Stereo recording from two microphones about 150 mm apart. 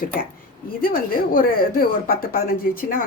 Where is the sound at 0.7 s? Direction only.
70° left (ahead or behind).